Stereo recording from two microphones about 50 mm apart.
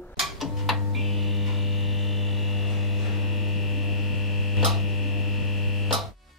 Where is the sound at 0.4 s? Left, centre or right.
Centre.